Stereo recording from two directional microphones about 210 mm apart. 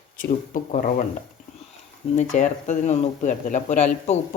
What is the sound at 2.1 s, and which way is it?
Speech, 35° left (ahead or behind).